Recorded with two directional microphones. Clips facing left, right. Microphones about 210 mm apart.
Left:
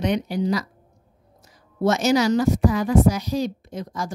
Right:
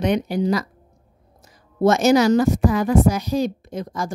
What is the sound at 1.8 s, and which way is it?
A woman's voice, 50° right (ahead or behind).